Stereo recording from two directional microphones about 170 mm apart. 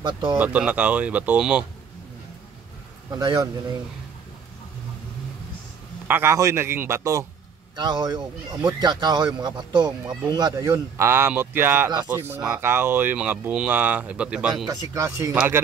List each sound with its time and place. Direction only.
0.0 s speech: 25° right (ahead or behind)
0.4 s speech: 10° right (ahead or behind)
3.1 s speech: 25° right (ahead or behind)
6.0 s speech: 15° right (ahead or behind)
14.7 s speech: 20° right (ahead or behind)